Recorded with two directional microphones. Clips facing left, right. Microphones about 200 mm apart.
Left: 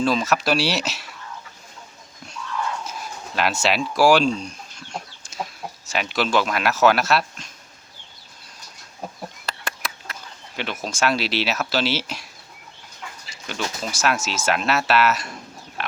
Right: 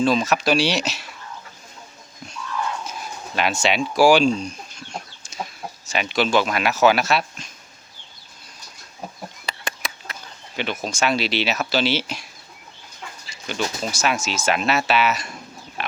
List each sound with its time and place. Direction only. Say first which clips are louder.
0.0 s speech: right 2 dB; 5° left (ahead or behind)
2.8 s a sound: right 1 dB; centre (ahead or behind)
3.9 s speech: right 2 dB; 5° left (ahead or behind)
4.3 s speech: right 2 dB; 45° right (ahead or behind)
4.9 s chicken: left 3 dB; 5° left (ahead or behind)
5.9 s speech: right 2 dB; centre (ahead or behind)
9.5 s a sound: right 1 dB; 5° left (ahead or behind)
10.6 s speech: right 1 dB; centre (ahead or behind)
13.5 s speech: right 3 dB; centre (ahead or behind)
15.8 s a sound: right 1 dB; centre (ahead or behind)